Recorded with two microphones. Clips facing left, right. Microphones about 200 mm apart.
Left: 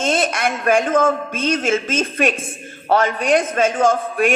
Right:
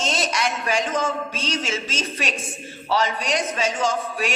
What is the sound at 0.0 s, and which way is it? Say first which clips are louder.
A woman's voice: left 5 dB; 55° left (ahead or behind).